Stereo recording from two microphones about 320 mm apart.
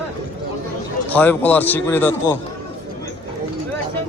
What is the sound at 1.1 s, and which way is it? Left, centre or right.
A man's voice, centre.